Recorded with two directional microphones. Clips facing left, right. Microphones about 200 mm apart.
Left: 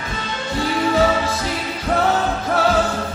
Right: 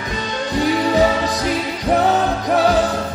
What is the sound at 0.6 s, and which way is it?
Music, 15° right (ahead or behind).